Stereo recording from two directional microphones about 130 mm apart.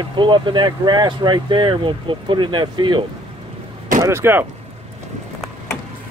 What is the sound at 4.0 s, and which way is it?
Speech, 20° right (ahead or behind).